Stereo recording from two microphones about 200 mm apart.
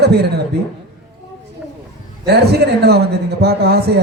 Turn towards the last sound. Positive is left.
turn(degrees=-55)  # may be behind; listen again after turning